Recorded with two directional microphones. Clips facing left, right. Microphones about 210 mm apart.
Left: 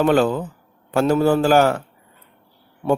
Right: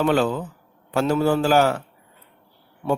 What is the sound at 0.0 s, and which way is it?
Speech, 45° left (ahead or behind).